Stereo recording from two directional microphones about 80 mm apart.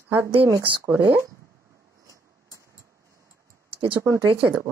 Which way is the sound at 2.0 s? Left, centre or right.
Right.